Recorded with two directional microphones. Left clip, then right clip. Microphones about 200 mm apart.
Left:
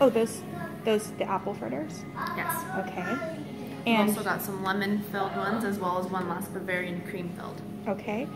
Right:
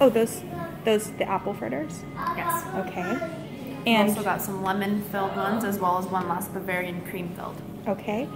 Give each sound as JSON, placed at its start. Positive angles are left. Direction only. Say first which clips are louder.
{"t": 0.0, "sound": "a woman's voice", "louder": "right 3 dB", "side_deg": -15}
{"t": 3.8, "sound": "a woman's voice", "louder": "right 4 dB", "side_deg": -10}
{"t": 4.2, "sound": "a woman's voice", "louder": "right 3 dB", "side_deg": -25}
{"t": 7.8, "sound": "a woman's voice", "louder": "right 3 dB", "side_deg": -10}